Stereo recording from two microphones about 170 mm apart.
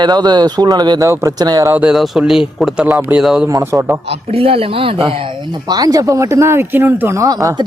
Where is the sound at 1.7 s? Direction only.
5° right (ahead or behind).